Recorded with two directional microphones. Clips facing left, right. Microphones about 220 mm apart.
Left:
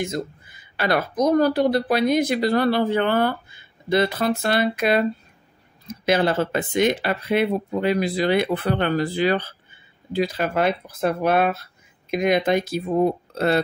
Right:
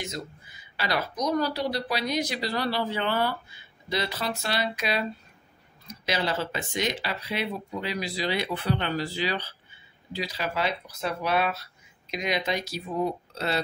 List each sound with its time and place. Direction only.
0.0 s speech: 50° left (ahead or behind)